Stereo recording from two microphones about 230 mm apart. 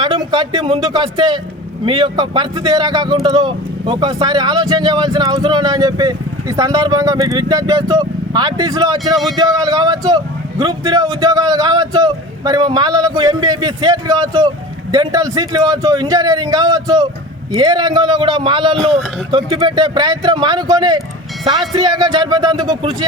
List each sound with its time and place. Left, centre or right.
0.0 s speech: centre
18.8 s speech: centre
19.5 s speech: centre